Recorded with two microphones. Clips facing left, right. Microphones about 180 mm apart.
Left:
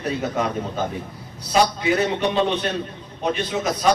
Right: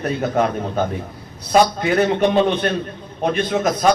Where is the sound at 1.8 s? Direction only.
50° right (ahead or behind).